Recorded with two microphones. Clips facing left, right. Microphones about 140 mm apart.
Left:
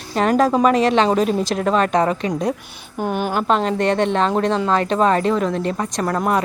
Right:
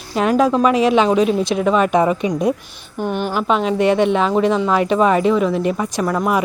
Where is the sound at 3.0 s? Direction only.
45° left (ahead or behind).